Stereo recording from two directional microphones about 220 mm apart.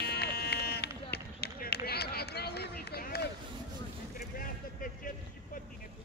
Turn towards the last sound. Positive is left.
turn(degrees=40)  # may be behind; listen again after turning